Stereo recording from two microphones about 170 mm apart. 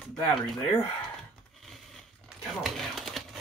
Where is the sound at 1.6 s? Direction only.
Centre (ahead or behind).